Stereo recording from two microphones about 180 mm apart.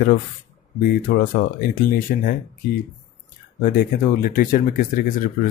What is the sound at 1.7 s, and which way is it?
Speech, 50° left (ahead or behind).